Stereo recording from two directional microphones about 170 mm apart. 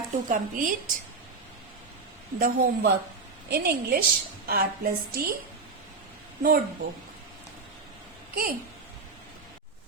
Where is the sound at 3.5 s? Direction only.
65° right (ahead or behind).